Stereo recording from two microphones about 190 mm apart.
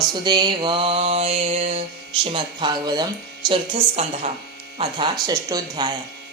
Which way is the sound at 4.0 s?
35° right (ahead or behind).